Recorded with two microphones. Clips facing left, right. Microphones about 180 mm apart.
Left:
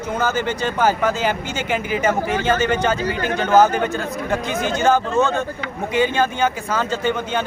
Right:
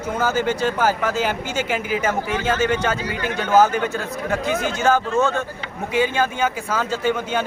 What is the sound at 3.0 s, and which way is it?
Speech, 45° left (ahead or behind).